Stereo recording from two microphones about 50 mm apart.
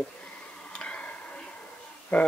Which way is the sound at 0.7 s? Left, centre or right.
Left.